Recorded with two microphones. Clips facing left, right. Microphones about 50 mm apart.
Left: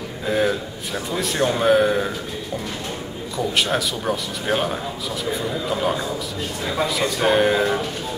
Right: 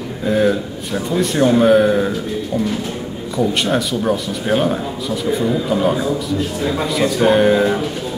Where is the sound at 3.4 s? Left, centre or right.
Centre.